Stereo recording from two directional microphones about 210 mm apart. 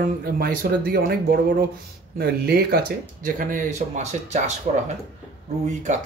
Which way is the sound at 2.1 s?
45° right (ahead or behind).